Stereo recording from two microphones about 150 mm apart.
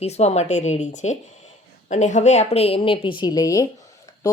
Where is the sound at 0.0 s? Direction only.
45° left (ahead or behind).